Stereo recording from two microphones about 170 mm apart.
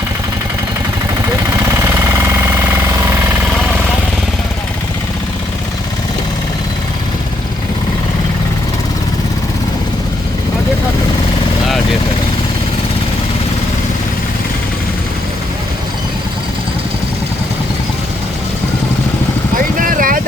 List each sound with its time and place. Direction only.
1.7 s engine: 15° right (ahead or behind)
19.5 s vehicle: 55° right (ahead or behind)